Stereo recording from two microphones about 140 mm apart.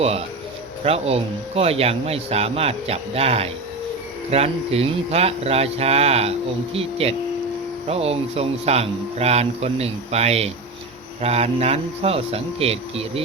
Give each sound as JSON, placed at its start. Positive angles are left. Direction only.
{"t": 0.0, "sound": "speech", "side_deg": -45}